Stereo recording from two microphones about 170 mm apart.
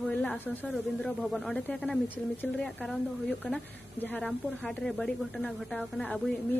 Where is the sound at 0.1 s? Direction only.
5° left (ahead or behind).